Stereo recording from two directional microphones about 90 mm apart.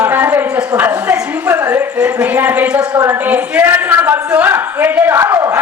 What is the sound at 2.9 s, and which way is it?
A man's voice, 30° right (ahead or behind).